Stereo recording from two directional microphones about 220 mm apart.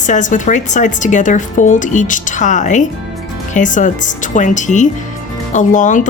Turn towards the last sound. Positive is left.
turn(degrees=35)  # may be behind; listen again after turning